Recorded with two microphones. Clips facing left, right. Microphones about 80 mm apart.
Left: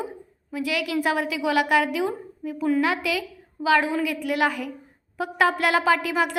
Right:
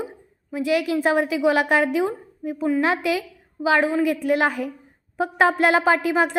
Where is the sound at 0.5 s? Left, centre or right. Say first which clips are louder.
Right 4 dB; right.